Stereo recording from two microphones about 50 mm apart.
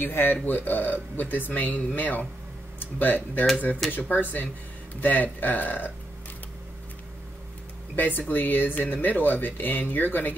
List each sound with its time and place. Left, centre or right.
0.0 s speech: left
7.9 s speech: left